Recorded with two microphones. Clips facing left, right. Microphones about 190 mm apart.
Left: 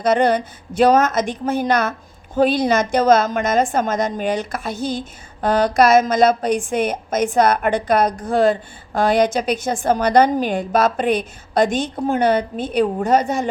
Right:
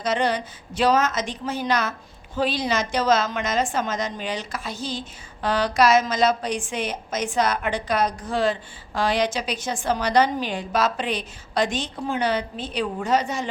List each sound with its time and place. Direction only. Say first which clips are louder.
0.0 s a woman's voice: left 7 dB; 55° left (ahead or behind)